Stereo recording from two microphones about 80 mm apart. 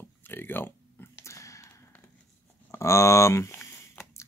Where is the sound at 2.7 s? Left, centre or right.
Left.